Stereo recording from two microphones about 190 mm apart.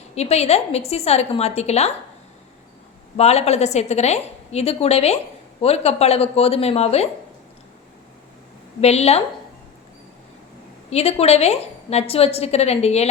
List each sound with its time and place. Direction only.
0.2 s a woman's voice: 35° left (ahead or behind)
3.2 s a woman's voice: 35° left (ahead or behind)
8.8 s a woman's voice: 35° left (ahead or behind)
10.8 s a woman's voice: 35° left (ahead or behind)